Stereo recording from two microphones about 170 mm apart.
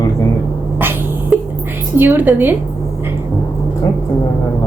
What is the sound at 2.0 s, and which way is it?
Speech, 10° right (ahead or behind).